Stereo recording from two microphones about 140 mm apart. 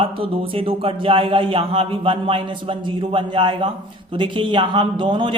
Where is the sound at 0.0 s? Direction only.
40° right (ahead or behind).